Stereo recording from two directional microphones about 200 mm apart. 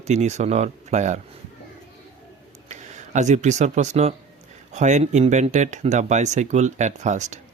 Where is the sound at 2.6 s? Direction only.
35° right (ahead or behind).